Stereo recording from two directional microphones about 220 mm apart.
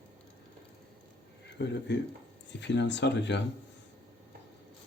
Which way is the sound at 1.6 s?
50° left (ahead or behind).